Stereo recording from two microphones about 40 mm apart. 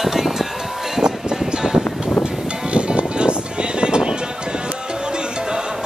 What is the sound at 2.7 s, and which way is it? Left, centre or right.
Music, right.